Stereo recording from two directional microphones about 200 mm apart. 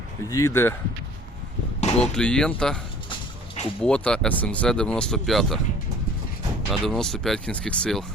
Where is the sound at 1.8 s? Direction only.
35° left (ahead or behind).